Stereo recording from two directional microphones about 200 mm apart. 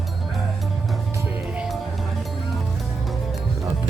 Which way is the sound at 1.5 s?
5° right (ahead or behind).